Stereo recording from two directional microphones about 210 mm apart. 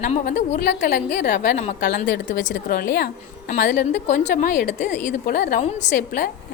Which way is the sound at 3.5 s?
35° left (ahead or behind).